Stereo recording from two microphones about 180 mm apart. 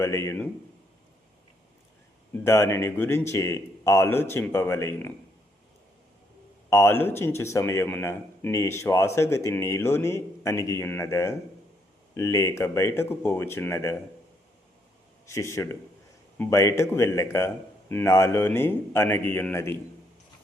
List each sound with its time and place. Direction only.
0.0 s a man's voice: 15° left (ahead or behind)
2.3 s a man's voice: 15° left (ahead or behind)
6.7 s a man's voice: 15° left (ahead or behind)
15.3 s a man's voice: 15° left (ahead or behind)